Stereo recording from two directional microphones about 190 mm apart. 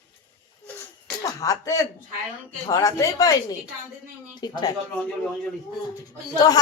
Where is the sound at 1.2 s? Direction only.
15° left (ahead or behind).